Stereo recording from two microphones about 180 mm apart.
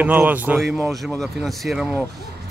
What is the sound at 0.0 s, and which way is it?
Speech, 10° right (ahead or behind).